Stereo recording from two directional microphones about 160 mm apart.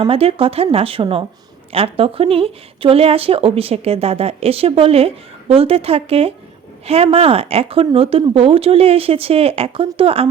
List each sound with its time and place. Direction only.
0.0 s speech: 35° right (ahead or behind)